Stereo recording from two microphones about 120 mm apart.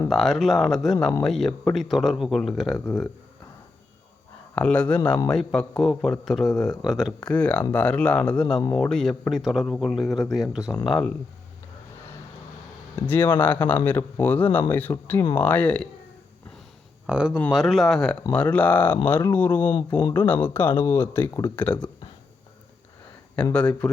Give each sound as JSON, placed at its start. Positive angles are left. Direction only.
{"t": 0.1, "sound": "speech", "side_deg": 0}
{"t": 4.5, "sound": "speech", "side_deg": 10}
{"t": 7.2, "sound": "speech", "side_deg": 10}
{"t": 8.5, "sound": "speech", "side_deg": 35}
{"t": 8.8, "sound": "speech", "side_deg": 5}
{"t": 10.8, "sound": "speech", "side_deg": 10}
{"t": 13.0, "sound": "speech", "side_deg": 15}
{"t": 17.1, "sound": "speech", "side_deg": -10}
{"t": 23.3, "sound": "speech", "side_deg": 10}